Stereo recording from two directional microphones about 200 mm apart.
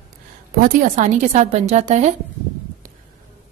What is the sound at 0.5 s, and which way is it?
A woman's voice, 45° right (ahead or behind).